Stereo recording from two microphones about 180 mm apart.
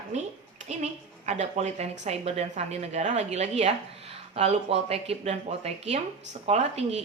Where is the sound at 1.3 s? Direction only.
40° right (ahead or behind).